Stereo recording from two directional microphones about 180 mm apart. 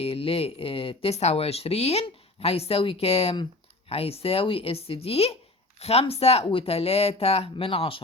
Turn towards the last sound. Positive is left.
turn(degrees=30)  # may be behind; listen again after turning